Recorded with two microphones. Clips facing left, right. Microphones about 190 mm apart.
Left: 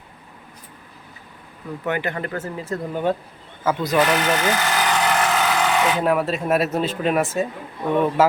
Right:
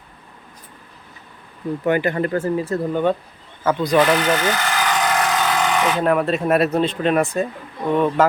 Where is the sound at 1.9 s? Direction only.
35° right (ahead or behind).